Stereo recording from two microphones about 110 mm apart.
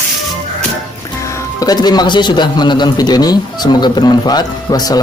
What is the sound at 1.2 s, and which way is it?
Speech, 30° left (ahead or behind).